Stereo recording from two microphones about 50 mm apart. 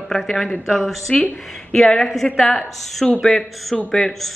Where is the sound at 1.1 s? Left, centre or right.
Left.